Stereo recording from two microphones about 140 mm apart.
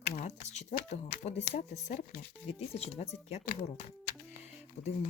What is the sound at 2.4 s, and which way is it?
Speech, 50° left (ahead or behind).